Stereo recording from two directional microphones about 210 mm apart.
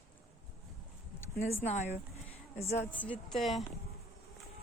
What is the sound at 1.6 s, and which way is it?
Speech, 30° left (ahead or behind).